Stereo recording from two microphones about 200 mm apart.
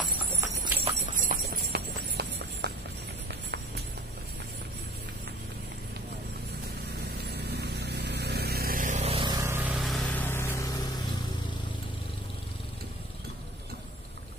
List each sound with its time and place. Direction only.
0.2 s horse: 10° right (ahead or behind)
1.2 s clip-clop: 50° right (ahead or behind)
3.3 s music: 55° right (ahead or behind)
7.2 s vehicle: 55° right (ahead or behind); by 11.1 s 15° left (ahead or behind)